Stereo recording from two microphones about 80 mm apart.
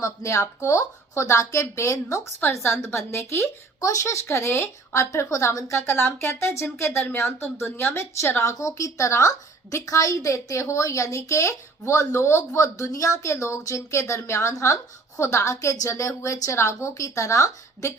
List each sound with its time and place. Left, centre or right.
0.0 s speech: left